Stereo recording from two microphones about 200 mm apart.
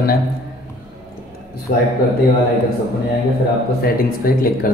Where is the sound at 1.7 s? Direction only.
45° left (ahead or behind).